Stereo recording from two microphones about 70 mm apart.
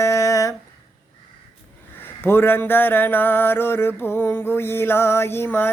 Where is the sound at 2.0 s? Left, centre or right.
Left.